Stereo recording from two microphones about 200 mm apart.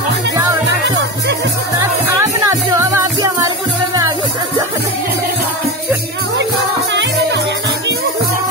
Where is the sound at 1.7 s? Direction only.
15° right (ahead or behind).